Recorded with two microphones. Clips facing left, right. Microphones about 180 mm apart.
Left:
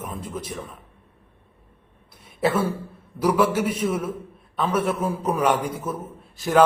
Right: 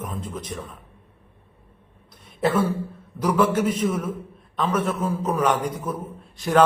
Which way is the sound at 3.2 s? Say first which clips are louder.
Even; 10° left (ahead or behind).